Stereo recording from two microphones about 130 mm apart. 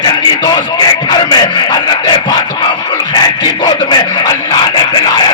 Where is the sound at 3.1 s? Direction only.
35° left (ahead or behind).